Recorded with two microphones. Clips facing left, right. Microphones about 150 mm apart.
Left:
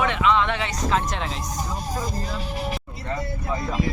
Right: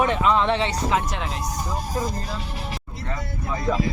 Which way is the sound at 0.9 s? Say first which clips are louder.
Even; 5° right (ahead or behind).